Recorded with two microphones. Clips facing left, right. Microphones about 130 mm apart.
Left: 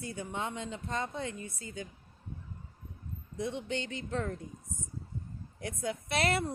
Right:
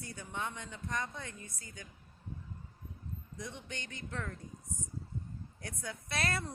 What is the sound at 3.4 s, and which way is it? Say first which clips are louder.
Speech: left 11 dB; 25° left (ahead or behind).